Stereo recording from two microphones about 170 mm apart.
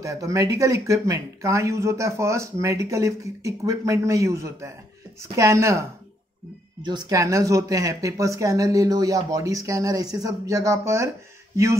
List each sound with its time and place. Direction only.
0.0 s speech: 20° right (ahead or behind)